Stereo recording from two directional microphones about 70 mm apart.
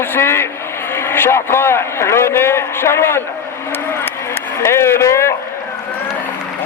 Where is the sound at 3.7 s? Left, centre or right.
Left.